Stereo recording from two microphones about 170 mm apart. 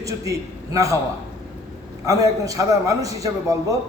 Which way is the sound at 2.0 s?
20° right (ahead or behind).